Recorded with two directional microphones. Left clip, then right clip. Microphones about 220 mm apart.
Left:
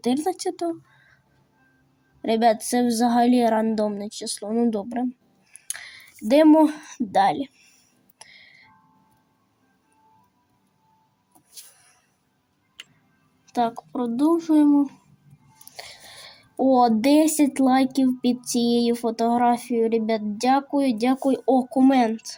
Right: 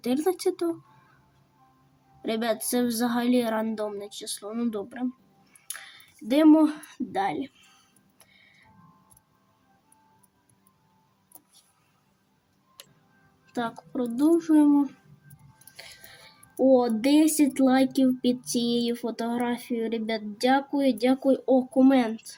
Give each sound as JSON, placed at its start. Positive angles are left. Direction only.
{"t": 0.3, "sound": "speech", "side_deg": 15}
{"t": 2.2, "sound": "speech", "side_deg": 25}
{"t": 8.2, "sound": "tick", "side_deg": 25}
{"t": 13.5, "sound": "a woman's voice", "side_deg": 25}
{"t": 15.7, "sound": "speech", "side_deg": 30}